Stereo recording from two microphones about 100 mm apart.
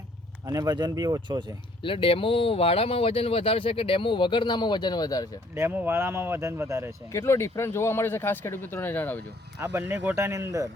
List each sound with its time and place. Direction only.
0.4 s speech: 35° right (ahead or behind)
1.8 s speech: 60° left (ahead or behind); by 5.4 s 40° left (ahead or behind)
5.5 s speech: 20° right (ahead or behind)
7.1 s speech: 30° left (ahead or behind)
9.6 s speech: 25° right (ahead or behind)